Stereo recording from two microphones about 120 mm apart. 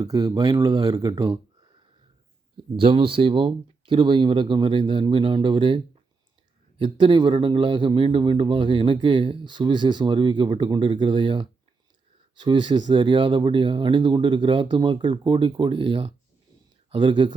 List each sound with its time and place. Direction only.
0.0 s speech: 30° right (ahead or behind)
2.7 s a man's voice: 45° right (ahead or behind)